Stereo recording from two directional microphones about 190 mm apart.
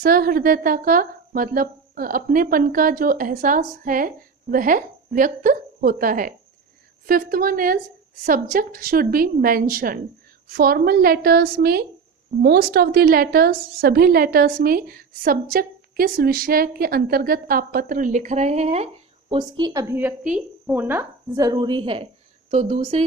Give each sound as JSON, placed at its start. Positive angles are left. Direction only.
{"t": 0.0, "sound": "a woman's voice", "side_deg": -50}
{"t": 19.3, "sound": "a woman's voice", "side_deg": -25}